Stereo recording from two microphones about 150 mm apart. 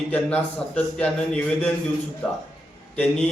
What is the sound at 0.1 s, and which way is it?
A man's voice, 10° left (ahead or behind).